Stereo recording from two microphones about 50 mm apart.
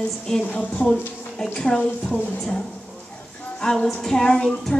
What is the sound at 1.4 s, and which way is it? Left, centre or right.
Speech, centre.